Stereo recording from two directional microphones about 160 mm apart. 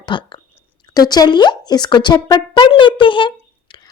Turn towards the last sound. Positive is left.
turn(degrees=30)  # may be behind; listen again after turning